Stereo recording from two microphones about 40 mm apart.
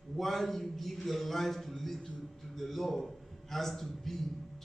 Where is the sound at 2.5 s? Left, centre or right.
Centre.